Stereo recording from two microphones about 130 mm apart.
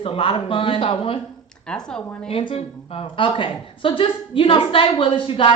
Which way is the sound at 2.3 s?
45° left (ahead or behind).